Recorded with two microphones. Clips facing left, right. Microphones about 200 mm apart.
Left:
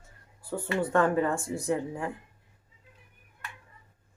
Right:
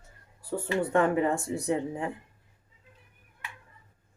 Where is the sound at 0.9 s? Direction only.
15° right (ahead or behind).